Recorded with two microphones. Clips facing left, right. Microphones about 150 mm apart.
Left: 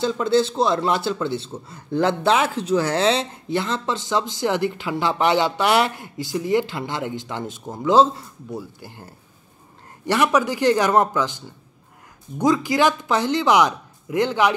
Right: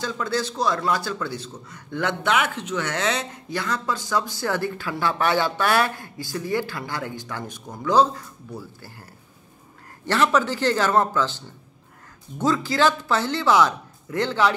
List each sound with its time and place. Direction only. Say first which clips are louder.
0.0 s a man's voice: left 7 dB; 25° left (ahead or behind)